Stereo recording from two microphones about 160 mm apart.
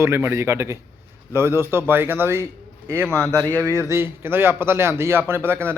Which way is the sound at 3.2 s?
10° left (ahead or behind).